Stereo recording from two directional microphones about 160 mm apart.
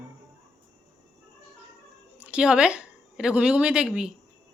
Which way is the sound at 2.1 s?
5° right (ahead or behind).